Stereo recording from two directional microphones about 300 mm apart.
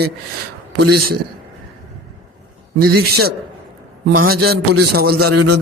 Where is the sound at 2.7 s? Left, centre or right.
Right.